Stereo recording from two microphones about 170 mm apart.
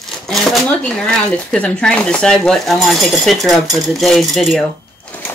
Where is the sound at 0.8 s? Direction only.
5° left (ahead or behind).